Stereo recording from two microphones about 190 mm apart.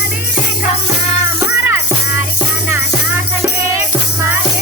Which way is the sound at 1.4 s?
15° right (ahead or behind).